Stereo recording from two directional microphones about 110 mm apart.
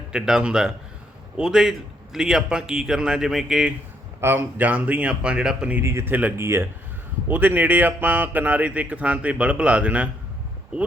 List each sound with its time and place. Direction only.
0.1 s speech: 5° right (ahead or behind)
4.2 s speech: 20° right (ahead or behind)
5.8 s speech: 25° right (ahead or behind)